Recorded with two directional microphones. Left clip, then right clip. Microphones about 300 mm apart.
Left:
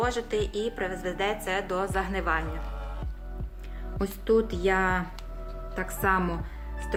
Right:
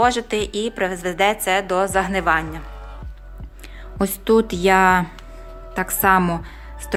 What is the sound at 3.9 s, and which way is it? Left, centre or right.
A woman's voice, right.